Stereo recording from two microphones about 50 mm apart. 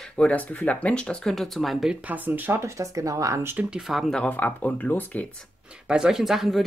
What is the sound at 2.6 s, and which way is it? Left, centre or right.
Speech, right.